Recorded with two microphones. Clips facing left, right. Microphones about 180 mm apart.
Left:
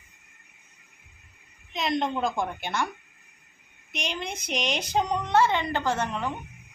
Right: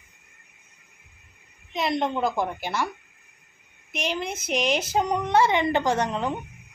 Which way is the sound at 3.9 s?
5° right (ahead or behind).